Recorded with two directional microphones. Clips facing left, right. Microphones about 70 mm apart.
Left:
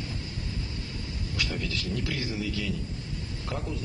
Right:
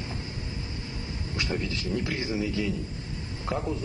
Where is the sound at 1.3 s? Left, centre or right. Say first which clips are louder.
Right 2 dB; right.